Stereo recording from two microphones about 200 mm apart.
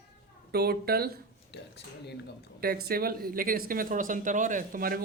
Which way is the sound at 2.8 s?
50° right (ahead or behind).